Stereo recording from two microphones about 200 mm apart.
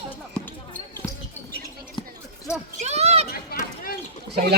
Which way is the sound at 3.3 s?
50° left (ahead or behind).